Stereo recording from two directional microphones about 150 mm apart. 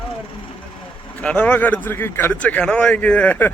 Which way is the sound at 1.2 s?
10° left (ahead or behind).